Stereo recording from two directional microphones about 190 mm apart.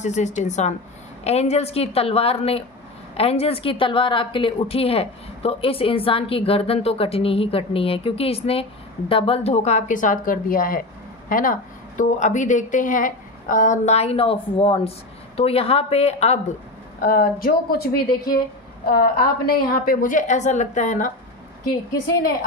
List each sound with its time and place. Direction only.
0.0 s a woman's voice: 40° left (ahead or behind)
17.0 s a woman's voice: 45° left (ahead or behind)